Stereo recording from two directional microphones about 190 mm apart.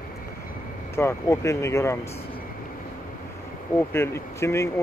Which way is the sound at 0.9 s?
15° left (ahead or behind).